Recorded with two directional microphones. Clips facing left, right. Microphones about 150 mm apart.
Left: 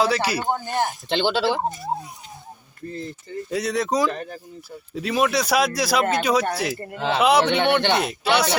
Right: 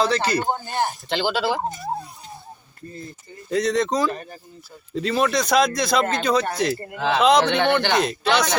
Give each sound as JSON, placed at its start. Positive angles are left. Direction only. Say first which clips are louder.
{"t": 0.0, "sound": "speech", "louder": "right 1 dB", "side_deg": 10}
{"t": 1.1, "sound": "speech", "louder": "left 2 dB", "side_deg": 25}
{"t": 3.5, "sound": "speech", "louder": "right 2 dB", "side_deg": 5}